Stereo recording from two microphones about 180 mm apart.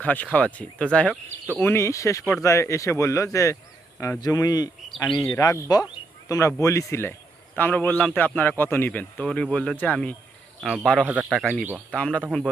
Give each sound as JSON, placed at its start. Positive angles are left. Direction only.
{"t": 0.0, "sound": "a man's voice", "side_deg": 10}
{"t": 4.9, "sound": "speech", "side_deg": 5}
{"t": 5.1, "sound": "a man's voice", "side_deg": 20}
{"t": 5.9, "sound": "a sound", "side_deg": 20}
{"t": 6.6, "sound": "a man's voice", "side_deg": 15}
{"t": 11.0, "sound": "a man's voice", "side_deg": -10}
{"t": 11.3, "sound": "a man's voice", "side_deg": 5}